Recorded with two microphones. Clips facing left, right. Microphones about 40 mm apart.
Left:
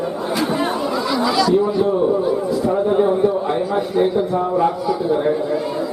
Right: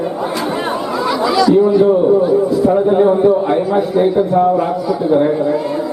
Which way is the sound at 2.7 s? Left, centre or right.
Centre.